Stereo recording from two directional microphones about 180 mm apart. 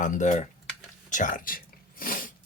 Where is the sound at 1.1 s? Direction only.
45° left (ahead or behind).